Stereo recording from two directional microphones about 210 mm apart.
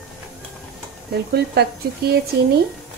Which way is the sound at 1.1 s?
50° right (ahead or behind).